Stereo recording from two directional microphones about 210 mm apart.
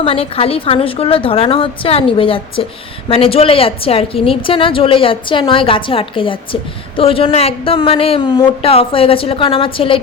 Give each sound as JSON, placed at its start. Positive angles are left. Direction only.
{"t": 0.0, "sound": "a woman's voice", "side_deg": 25}